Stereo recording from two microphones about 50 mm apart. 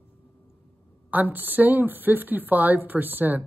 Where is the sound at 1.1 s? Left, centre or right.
Right.